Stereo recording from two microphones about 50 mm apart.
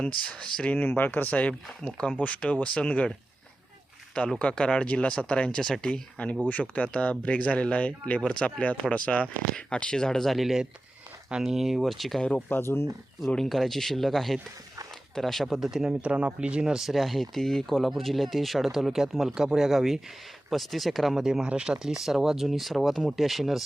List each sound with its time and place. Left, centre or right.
0.0 s speech: left
0.8 s speech: left
1.8 s speech: centre
2.1 s speech: left
4.4 s speech: left
5.1 s speech: centre
6.2 s speech: left; by 10.3 s centre
10.3 s speech: centre
12.5 s speech: left
13.2 s speech: centre
15.6 s speech: centre
15.9 s speech: right
16.9 s speech: centre
21.8 s speech: centre